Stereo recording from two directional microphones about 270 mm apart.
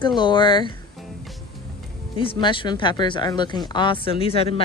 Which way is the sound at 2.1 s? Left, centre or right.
Centre.